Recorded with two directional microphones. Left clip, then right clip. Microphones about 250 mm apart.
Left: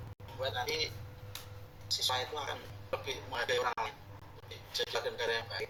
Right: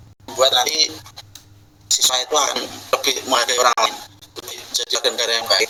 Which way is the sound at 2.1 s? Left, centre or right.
Right.